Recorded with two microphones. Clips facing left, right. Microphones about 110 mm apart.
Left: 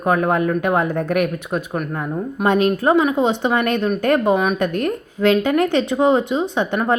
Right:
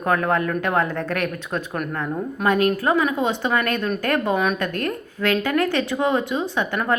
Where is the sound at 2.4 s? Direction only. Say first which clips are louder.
Left 3 dB; 25° left (ahead or behind).